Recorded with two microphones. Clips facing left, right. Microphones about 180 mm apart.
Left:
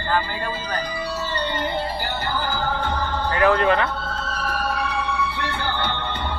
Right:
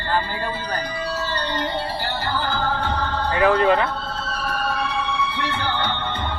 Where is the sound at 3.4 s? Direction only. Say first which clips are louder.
Right 1 dB; 20° right (ahead or behind).